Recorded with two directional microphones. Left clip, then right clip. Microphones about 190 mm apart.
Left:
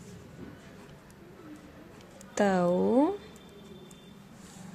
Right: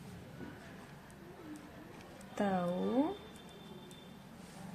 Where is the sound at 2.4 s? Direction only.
55° left (ahead or behind).